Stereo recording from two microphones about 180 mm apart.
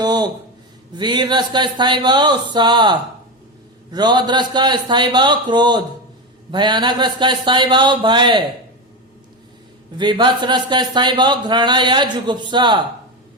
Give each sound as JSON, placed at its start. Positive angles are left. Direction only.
{"t": 0.0, "sound": "a sound", "side_deg": -20}
{"t": 0.9, "sound": "speech", "side_deg": -25}
{"t": 10.0, "sound": "speech", "side_deg": -25}